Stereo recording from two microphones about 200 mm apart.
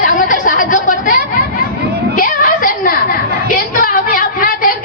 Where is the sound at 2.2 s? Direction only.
45° left (ahead or behind).